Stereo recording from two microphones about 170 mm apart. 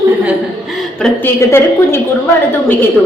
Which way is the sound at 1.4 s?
15° left (ahead or behind).